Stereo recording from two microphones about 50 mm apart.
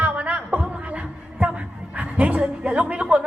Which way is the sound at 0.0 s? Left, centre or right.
Right.